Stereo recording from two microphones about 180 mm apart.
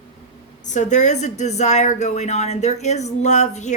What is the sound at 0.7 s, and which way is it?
A woman's voice, 40° left (ahead or behind).